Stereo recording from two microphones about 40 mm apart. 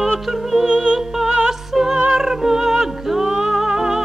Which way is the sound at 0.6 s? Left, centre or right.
Right.